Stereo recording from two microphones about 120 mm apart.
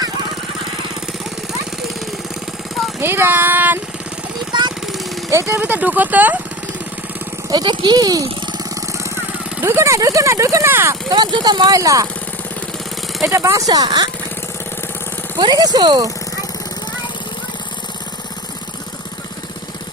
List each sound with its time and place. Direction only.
3.0 s speech: 20° right (ahead or behind)
4.5 s jackhammer: 40° right (ahead or behind)
5.3 s speech: 25° right (ahead or behind)
7.5 s speech: 40° right (ahead or behind)
8.4 s vehicle: 30° right (ahead or behind)
11.1 s speech: 40° right (ahead or behind)
13.2 s speech: 25° right (ahead or behind)
15.4 s speech: 35° right (ahead or behind)